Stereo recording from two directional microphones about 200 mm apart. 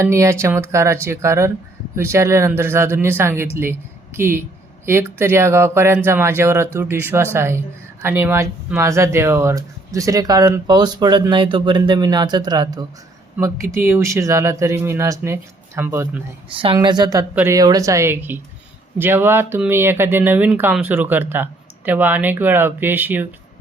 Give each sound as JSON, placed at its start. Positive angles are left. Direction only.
{"t": 0.0, "sound": "speech", "side_deg": -15}
{"t": 16.6, "sound": "a woman's voice", "side_deg": -25}